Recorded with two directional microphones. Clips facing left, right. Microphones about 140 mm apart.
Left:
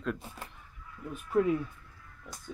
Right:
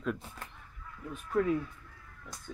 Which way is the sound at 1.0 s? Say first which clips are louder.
Left 3 dB; 10° left (ahead or behind).